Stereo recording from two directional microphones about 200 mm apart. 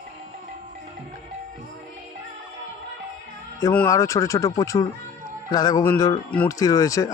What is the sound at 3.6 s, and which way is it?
Speech, 15° left (ahead or behind).